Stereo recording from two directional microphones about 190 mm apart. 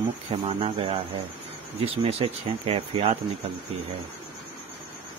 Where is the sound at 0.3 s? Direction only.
30° right (ahead or behind).